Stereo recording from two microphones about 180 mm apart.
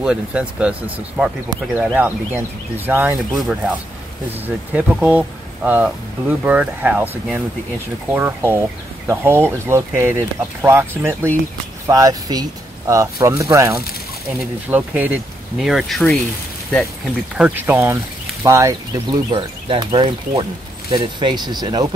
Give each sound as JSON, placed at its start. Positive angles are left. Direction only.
{"t": 0.0, "sound": "speech", "side_deg": -5}
{"t": 4.7, "sound": "speech", "side_deg": -10}
{"t": 17.4, "sound": "speech", "side_deg": -10}
{"t": 19.3, "sound": "speech", "side_deg": -30}